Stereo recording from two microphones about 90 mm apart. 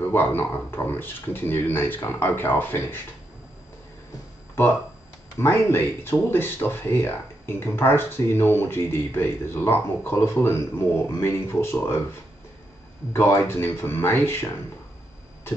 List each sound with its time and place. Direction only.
0.1 s speech: 25° left (ahead or behind)
5.4 s speech: 25° left (ahead or behind)
13.4 s speech: 25° left (ahead or behind)